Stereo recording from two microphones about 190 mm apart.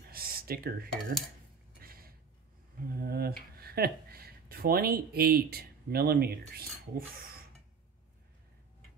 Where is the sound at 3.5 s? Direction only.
55° right (ahead or behind).